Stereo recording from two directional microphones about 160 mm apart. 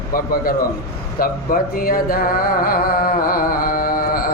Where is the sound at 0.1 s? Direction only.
65° left (ahead or behind).